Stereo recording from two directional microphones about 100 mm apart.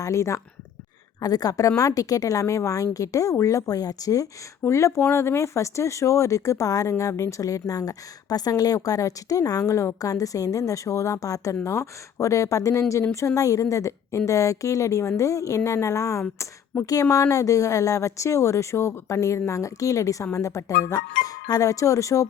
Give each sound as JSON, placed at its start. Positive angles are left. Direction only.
{"t": 0.0, "sound": "speech", "side_deg": 30}